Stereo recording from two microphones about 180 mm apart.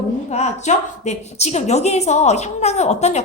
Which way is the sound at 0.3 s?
40° left (ahead or behind).